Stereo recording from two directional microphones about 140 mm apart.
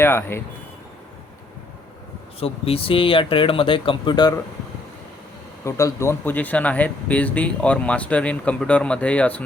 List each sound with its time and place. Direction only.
0.0 s speech: 15° left (ahead or behind)
2.4 s speech: 45° left (ahead or behind)
5.6 s speech: 20° left (ahead or behind)